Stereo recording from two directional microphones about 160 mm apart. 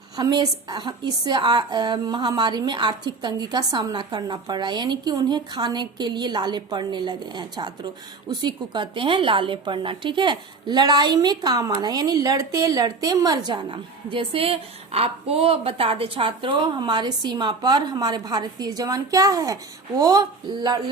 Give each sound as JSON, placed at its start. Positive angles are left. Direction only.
{"t": 0.2, "sound": "a woman's voice", "side_deg": -25}